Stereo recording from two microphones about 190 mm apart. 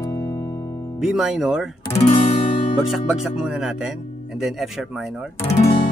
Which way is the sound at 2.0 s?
30° left (ahead or behind).